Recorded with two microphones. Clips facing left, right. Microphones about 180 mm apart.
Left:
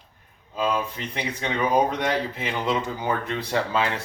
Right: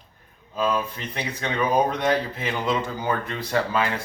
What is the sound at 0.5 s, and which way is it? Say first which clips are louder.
Speech: right 1 dB; 15° left (ahead or behind).